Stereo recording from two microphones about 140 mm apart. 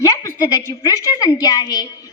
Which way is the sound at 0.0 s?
25° left (ahead or behind).